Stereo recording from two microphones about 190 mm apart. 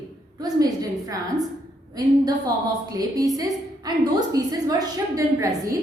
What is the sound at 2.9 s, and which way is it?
A woman's voice, 20° right (ahead or behind).